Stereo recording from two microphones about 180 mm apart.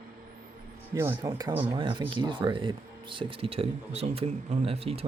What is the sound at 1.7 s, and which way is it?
Speech, 30° right (ahead or behind).